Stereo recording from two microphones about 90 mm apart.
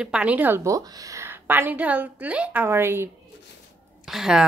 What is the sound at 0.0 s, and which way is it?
Speech, 10° right (ahead or behind).